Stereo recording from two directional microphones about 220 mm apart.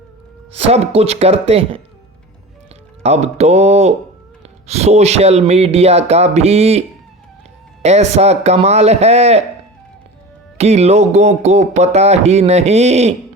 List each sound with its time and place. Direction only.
0.5 s speech: 30° right (ahead or behind)
3.0 s speech: 30° right (ahead or behind)
10.6 s speech: 30° right (ahead or behind)